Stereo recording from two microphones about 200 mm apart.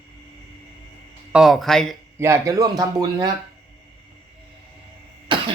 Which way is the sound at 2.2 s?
15° right (ahead or behind).